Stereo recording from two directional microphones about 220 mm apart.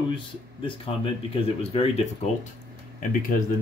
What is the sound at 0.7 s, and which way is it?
A man's voice, 25° left (ahead or behind).